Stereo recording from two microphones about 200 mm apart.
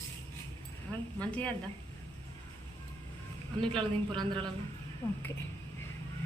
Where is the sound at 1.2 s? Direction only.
5° left (ahead or behind).